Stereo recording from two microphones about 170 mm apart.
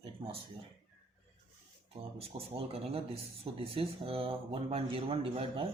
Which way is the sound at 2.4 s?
35° right (ahead or behind).